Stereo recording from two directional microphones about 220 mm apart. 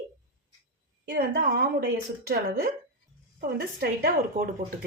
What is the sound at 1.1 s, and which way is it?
A woman's voice, 45° right (ahead or behind).